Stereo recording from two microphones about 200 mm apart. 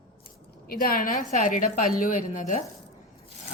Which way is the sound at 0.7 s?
45° left (ahead or behind).